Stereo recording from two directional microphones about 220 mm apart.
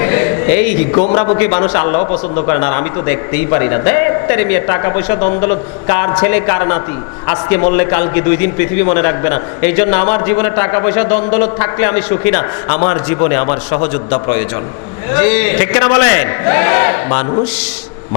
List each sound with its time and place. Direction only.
0.0 s a sound: 15° left (ahead or behind)
0.9 s a man's voice: 25° left (ahead or behind)
2.6 s a man's voice: 15° left (ahead or behind)
12.6 s a man's voice: 25° left (ahead or behind)
15.1 s a man's voice: 10° left (ahead or behind)